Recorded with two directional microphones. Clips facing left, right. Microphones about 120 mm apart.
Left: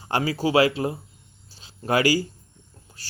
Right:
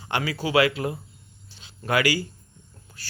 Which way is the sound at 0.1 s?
35° left (ahead or behind).